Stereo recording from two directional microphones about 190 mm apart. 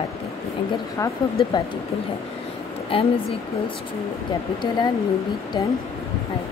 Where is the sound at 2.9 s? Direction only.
30° left (ahead or behind).